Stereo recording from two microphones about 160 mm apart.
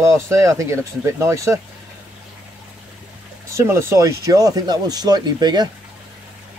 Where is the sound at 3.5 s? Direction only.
15° right (ahead or behind).